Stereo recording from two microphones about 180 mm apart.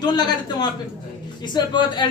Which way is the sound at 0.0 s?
20° left (ahead or behind).